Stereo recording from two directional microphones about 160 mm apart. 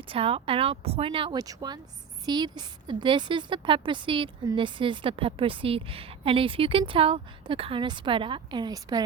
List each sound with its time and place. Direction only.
0.1 s a woman's voice: 35° right (ahead or behind)